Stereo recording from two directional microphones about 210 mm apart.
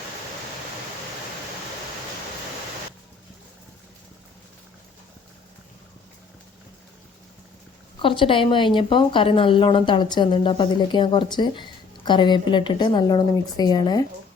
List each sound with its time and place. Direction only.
8.0 s a woman's voice: 25° left (ahead or behind)